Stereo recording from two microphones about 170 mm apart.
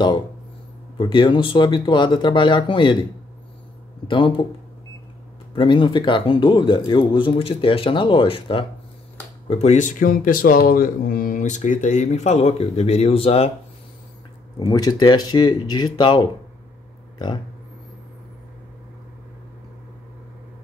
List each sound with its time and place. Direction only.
0.9 s speech: 30° left (ahead or behind)
4.1 s speech: 30° left (ahead or behind)
5.5 s speech: 30° left (ahead or behind)
14.7 s speech: 25° left (ahead or behind)